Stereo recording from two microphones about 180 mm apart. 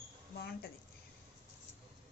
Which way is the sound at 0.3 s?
65° left (ahead or behind).